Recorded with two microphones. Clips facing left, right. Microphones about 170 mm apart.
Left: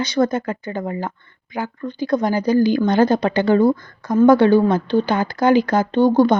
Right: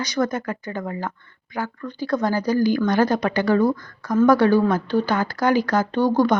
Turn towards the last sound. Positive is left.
turn(degrees=25)  # may be behind; listen again after turning